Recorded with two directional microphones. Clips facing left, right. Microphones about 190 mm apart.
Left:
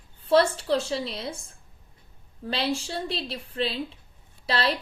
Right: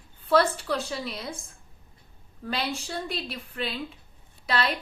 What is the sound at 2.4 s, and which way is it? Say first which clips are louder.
Speech: left 3 dB; 30° left (ahead or behind).